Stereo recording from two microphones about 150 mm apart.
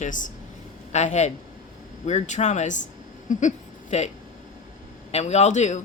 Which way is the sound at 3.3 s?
55° left (ahead or behind).